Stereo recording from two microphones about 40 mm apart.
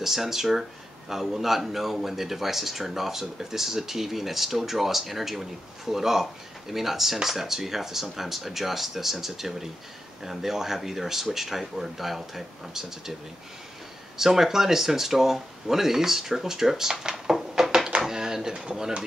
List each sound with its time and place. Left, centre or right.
0.0 s speech: centre
14.1 s speech: centre
17.6 s a sound: centre
18.8 s speech: centre